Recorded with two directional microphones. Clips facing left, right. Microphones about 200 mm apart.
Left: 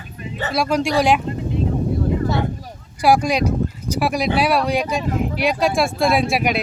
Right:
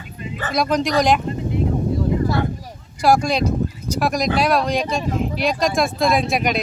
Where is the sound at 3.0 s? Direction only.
10° left (ahead or behind).